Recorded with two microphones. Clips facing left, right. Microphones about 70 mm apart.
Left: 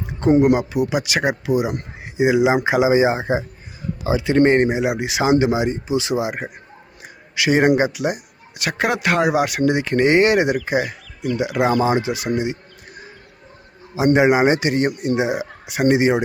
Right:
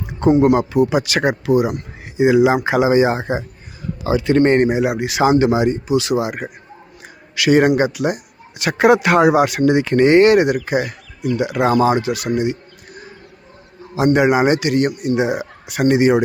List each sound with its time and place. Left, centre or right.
0.7 s speech: centre
5.9 s speech: left
7.0 s a sound: centre
7.8 s speech: centre
8.6 s speech: centre
13.9 s a man's voice: centre
14.2 s speech: centre
15.2 s speech: centre